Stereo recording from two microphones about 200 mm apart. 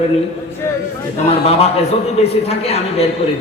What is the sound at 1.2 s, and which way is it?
A man's voice, 30° left (ahead or behind).